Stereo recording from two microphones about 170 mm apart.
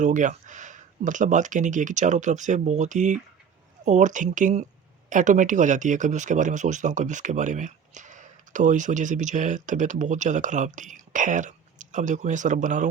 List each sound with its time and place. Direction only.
0.0 s speech: 45° right (ahead or behind)